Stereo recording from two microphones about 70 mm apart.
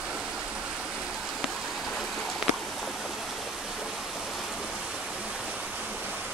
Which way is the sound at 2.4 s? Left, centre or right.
Centre.